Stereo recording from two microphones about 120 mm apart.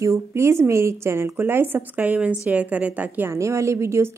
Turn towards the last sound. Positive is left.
turn(degrees=-20)  # may be behind; listen again after turning